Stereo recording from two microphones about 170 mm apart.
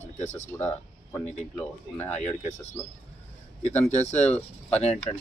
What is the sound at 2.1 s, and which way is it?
Speech, 45° left (ahead or behind).